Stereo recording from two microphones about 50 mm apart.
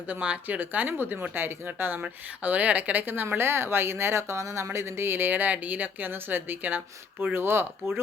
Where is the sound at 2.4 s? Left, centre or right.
Right.